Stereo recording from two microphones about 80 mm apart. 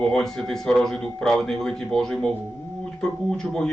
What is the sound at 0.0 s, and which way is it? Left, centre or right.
A man's voice, centre.